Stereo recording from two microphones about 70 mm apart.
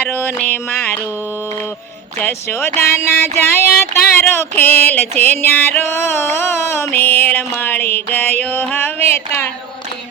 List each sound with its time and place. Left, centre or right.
0.0 s music: left
2.1 s music: left
2.6 s a sound: left